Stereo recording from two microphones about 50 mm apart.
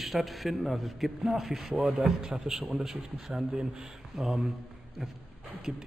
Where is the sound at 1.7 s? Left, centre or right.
Centre.